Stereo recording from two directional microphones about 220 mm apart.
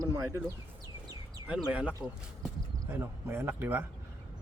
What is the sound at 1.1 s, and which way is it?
Bird, 15° right (ahead or behind).